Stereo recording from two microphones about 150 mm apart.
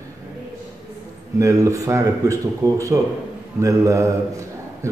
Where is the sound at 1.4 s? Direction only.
20° right (ahead or behind).